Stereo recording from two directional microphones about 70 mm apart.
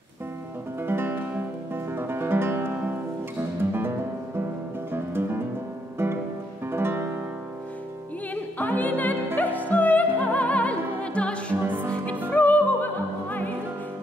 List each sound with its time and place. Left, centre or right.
0.8 s music: right
4.9 s music: right
6.7 s music: right
8.5 s music: left
11.6 s music: right
12.3 s opera: left